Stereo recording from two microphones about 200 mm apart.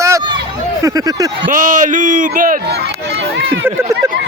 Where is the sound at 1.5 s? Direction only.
40° right (ahead or behind); by 3.6 s 55° right (ahead or behind).